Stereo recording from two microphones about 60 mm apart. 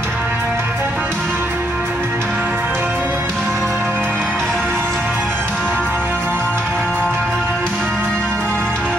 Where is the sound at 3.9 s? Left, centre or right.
Right.